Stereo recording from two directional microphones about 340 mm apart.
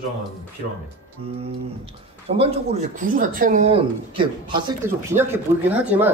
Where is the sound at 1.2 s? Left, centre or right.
Centre.